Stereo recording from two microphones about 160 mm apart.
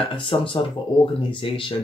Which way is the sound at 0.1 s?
35° left (ahead or behind).